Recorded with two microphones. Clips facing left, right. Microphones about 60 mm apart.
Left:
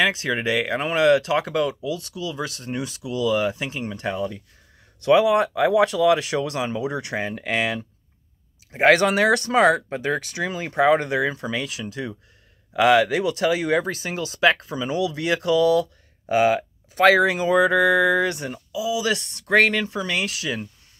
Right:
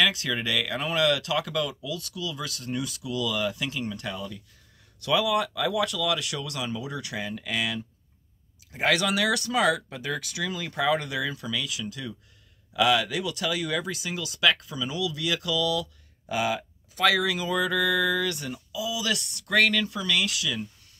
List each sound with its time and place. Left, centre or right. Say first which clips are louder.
0.0 s speech: left 4 dB; left